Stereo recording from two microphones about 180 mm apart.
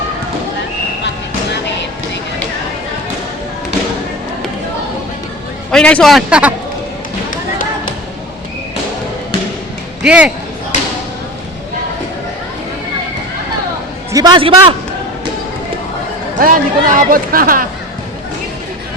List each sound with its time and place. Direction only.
5.7 s a man's voice: 5° left (ahead or behind)
10.0 s a man's voice: 5° right (ahead or behind)
14.1 s a man's voice: 20° right (ahead or behind)
16.4 s speech: 50° right (ahead or behind)